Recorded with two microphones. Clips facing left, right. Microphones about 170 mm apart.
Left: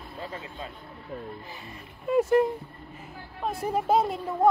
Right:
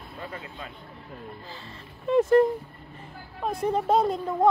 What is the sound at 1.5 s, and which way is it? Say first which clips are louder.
Speech: even; 20° left (ahead or behind).